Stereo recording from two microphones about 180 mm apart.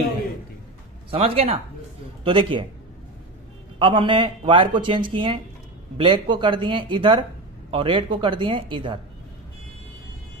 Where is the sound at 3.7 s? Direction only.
30° right (ahead or behind).